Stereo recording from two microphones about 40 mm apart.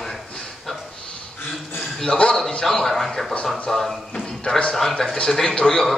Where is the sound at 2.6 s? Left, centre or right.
Centre.